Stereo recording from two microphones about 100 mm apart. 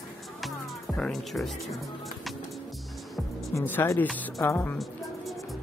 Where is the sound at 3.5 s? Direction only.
20° left (ahead or behind).